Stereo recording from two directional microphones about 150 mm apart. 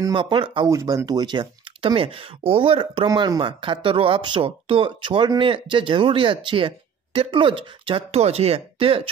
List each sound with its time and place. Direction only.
0.0 s speech: 35° right (ahead or behind)
0.7 s speech: 20° right (ahead or behind); by 9.1 s 40° right (ahead or behind)